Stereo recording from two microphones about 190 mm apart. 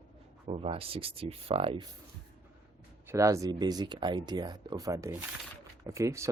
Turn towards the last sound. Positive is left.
turn(degrees=-15)  # may be behind; listen again after turning